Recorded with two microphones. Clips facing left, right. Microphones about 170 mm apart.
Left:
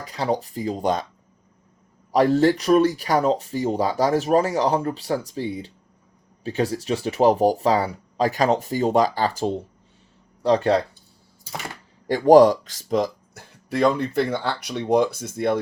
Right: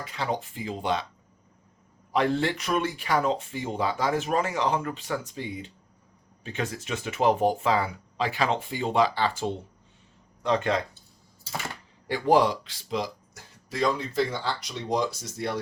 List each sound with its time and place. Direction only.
0.0 s speech: 35° left (ahead or behind)
2.1 s speech: 40° left (ahead or behind)
12.0 s speech: 40° left (ahead or behind)